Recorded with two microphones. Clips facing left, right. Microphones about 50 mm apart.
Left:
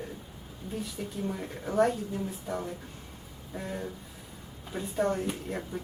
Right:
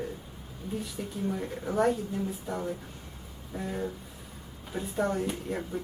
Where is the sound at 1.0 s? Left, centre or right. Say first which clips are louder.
Right 3 dB; centre.